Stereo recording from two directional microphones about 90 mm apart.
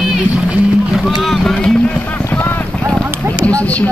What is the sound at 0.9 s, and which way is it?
Boat, centre (ahead or behind).